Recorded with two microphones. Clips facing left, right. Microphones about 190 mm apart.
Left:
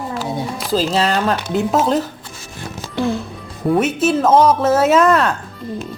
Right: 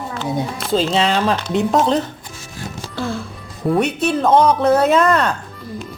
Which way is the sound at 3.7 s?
5° left (ahead or behind).